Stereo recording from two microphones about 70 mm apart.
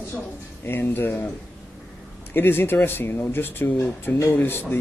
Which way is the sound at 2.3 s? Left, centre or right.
Left.